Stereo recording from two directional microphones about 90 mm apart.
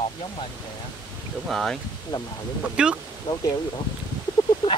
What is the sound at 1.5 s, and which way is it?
Speech, 5° left (ahead or behind).